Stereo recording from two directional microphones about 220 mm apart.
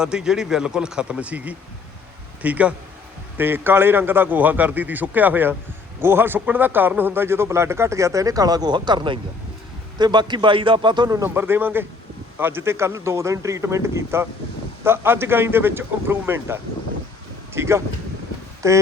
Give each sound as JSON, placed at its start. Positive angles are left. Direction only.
{"t": 0.0, "sound": "a man's voice", "side_deg": -5}